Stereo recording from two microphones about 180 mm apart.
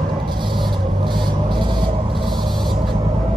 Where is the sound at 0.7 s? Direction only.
25° right (ahead or behind).